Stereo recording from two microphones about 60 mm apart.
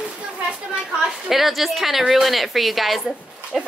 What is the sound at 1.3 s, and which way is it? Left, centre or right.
A woman's voice, centre.